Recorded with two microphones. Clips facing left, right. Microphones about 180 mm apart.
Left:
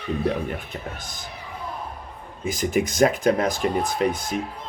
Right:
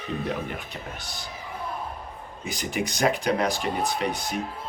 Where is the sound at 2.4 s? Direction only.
50° left (ahead or behind).